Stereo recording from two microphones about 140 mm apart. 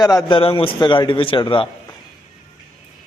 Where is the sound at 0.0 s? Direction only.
25° left (ahead or behind).